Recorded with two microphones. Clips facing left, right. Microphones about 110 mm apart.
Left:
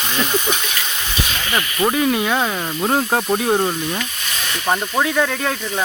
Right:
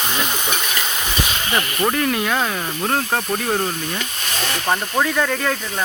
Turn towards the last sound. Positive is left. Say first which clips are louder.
# left 1 dB
turn(degrees=5)  # may be behind; listen again after turning